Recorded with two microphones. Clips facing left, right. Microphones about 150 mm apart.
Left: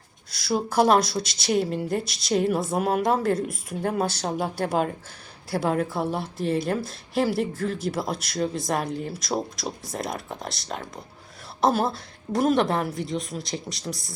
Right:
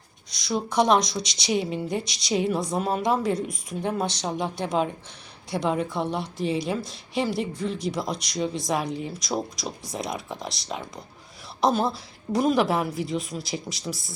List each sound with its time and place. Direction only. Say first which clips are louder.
0.3 s a woman's voice: left 1 dB; 5° left (ahead or behind)